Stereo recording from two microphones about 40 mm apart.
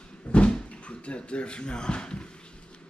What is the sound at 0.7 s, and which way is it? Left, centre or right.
Speech, left.